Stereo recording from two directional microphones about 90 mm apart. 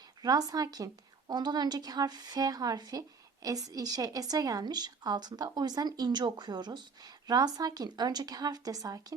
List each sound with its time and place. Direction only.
0.2 s a woman's voice: 45° right (ahead or behind)